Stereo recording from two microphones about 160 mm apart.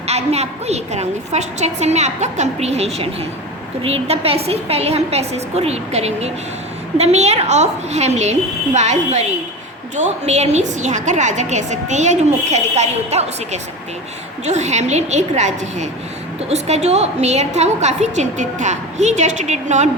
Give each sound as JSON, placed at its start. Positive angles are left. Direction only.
{"t": 0.1, "sound": "a woman's voice", "side_deg": -40}